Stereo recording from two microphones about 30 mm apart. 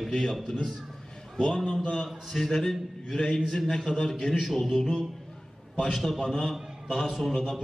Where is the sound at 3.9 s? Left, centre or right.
Left.